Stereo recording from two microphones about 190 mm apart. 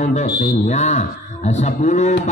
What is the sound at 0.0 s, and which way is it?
A man's voice, 40° left (ahead or behind).